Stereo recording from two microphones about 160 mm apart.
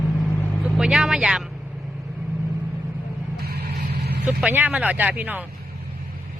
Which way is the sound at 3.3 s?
80° right.